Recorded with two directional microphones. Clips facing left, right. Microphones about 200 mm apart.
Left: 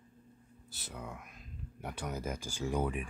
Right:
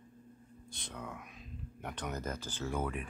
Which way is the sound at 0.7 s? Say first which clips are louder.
Even; 5° left (ahead or behind).